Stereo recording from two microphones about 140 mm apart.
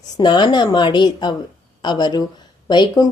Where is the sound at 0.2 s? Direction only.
35° left (ahead or behind).